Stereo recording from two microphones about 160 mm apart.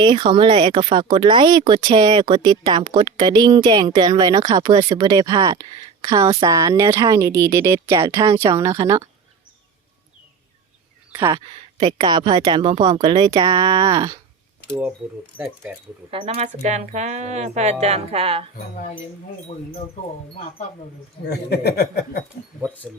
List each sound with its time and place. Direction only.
0.0 s speech: 30° right (ahead or behind)
11.1 s speech: 20° right (ahead or behind)
14.7 s speech: 5° right (ahead or behind)
16.1 s speech: 40° right (ahead or behind)
21.2 s speech: 85° left
22.8 s speech: centre (ahead or behind)